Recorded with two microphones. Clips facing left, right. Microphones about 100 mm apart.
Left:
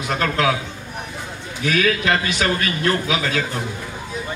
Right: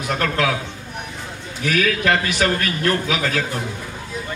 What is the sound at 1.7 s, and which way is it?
A man's voice, 55° right (ahead or behind).